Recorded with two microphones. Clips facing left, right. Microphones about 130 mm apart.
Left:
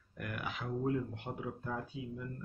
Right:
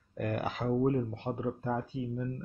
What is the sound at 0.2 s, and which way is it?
Speech, 40° right (ahead or behind).